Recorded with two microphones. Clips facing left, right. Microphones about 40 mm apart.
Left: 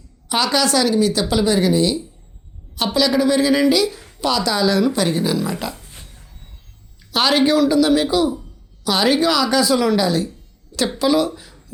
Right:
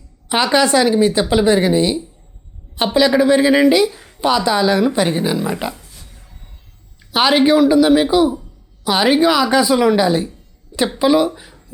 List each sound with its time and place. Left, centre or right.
0.3 s speech: right
5.7 s a sound: left
7.1 s speech: centre